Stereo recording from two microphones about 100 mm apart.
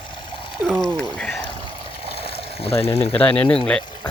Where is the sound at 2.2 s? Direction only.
75° left (ahead or behind).